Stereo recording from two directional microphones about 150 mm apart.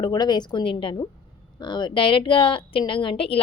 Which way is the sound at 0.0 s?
30° left (ahead or behind).